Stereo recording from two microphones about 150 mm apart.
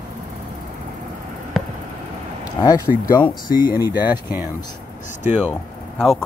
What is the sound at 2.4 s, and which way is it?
Speech, 25° left (ahead or behind).